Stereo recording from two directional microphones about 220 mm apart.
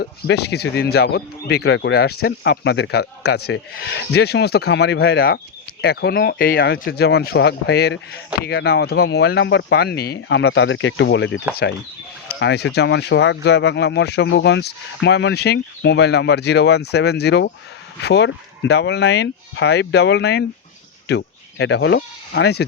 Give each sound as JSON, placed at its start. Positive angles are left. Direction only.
{"t": 0.0, "sound": "speech", "side_deg": 50}